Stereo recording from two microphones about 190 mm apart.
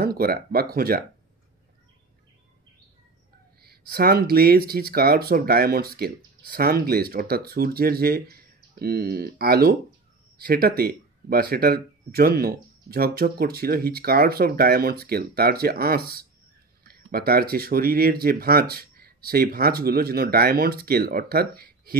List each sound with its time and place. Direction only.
0.0 s speech: 55° right (ahead or behind)
3.6 s speech: 50° right (ahead or behind)